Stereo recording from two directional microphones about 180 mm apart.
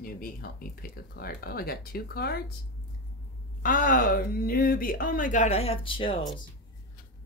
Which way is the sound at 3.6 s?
50° left (ahead or behind).